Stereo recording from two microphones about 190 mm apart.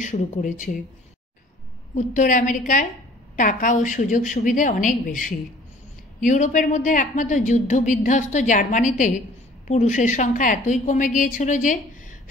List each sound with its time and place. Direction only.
0.0 s a woman's voice: 40° left (ahead or behind)
2.0 s a woman's voice: 40° left (ahead or behind)